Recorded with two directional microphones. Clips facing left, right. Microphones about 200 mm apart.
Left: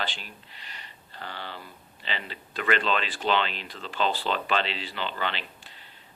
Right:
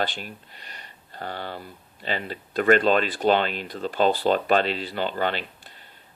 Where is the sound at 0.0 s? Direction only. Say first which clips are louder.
Right 7 dB; 50° right (ahead or behind).